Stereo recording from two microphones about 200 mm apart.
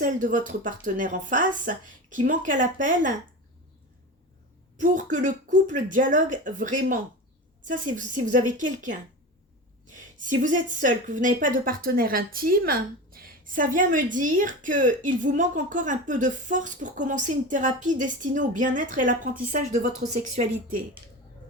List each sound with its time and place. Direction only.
0.0 s speech: 40° right (ahead or behind)
4.8 s speech: 40° right (ahead or behind)
10.2 s speech: 40° right (ahead or behind)